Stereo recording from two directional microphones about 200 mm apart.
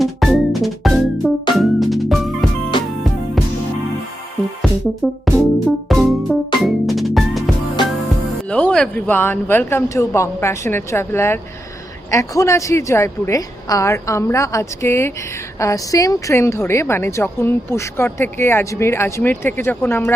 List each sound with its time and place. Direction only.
0.0 s music: centre (ahead or behind)
5.0 s music: centre (ahead or behind)
8.4 s a woman's voice: 5° left (ahead or behind)